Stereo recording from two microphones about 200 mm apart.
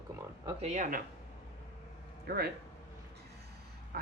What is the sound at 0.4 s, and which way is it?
Speech, 35° right (ahead or behind).